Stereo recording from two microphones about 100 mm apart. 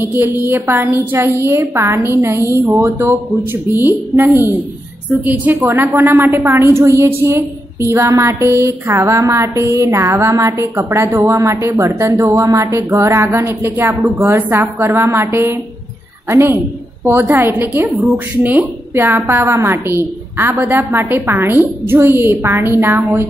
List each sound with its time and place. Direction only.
0.0 s a woman's voice: 20° right (ahead or behind)